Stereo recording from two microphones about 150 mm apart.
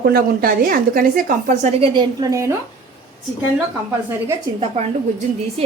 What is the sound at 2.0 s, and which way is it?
Speech, 25° right (ahead or behind).